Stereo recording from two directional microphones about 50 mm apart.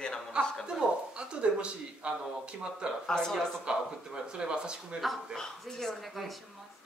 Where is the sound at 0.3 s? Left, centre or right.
Centre.